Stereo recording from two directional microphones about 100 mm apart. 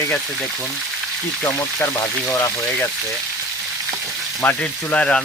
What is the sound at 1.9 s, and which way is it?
Speech, 30° left (ahead or behind).